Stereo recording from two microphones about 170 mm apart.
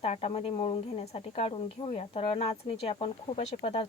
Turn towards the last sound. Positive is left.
turn(degrees=35)  # may be behind; listen again after turning